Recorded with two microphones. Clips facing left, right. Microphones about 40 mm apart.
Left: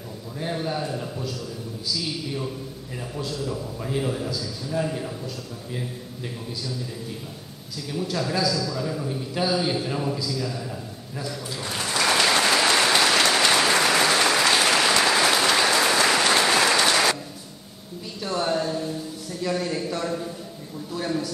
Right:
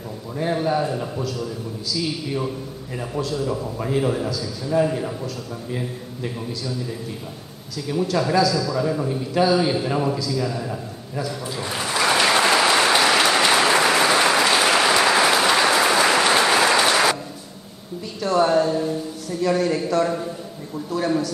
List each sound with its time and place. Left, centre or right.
0.4 s a man's voice: centre
7.9 s a man's voice: centre
10.3 s a sound: centre
18.3 s a man's voice: centre